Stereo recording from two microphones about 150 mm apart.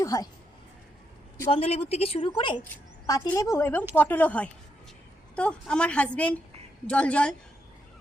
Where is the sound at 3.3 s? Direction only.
20° left (ahead or behind).